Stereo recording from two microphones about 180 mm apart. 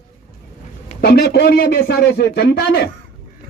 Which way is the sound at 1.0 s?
65° left (ahead or behind).